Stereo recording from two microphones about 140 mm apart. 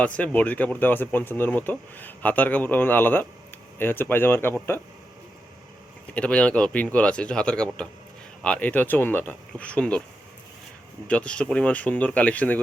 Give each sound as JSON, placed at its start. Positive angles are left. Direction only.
{"t": 0.0, "sound": "speech", "side_deg": 10}
{"t": 6.1, "sound": "speech", "side_deg": 10}
{"t": 11.1, "sound": "speech", "side_deg": 10}